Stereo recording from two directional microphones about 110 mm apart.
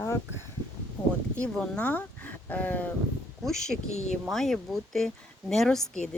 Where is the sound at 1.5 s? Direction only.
10° left (ahead or behind).